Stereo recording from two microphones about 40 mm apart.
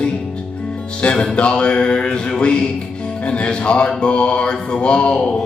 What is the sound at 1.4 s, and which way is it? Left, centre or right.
Music, left.